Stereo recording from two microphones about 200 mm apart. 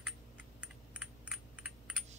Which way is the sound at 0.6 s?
5° right (ahead or behind).